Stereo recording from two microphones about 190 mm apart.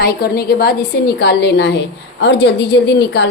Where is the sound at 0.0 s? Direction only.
55° left (ahead or behind).